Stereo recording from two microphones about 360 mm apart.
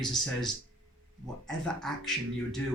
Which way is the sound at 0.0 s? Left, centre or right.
Centre.